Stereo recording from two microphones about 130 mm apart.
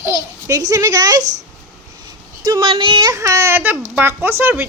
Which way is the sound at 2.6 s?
40° right (ahead or behind).